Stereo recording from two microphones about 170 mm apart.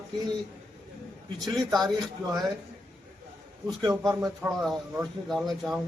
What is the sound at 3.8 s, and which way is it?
Speech, 20° right (ahead or behind).